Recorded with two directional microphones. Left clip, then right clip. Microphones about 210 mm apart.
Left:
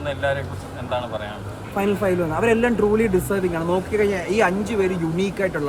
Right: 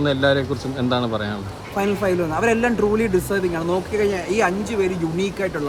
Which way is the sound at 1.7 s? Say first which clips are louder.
Even; 10° right (ahead or behind).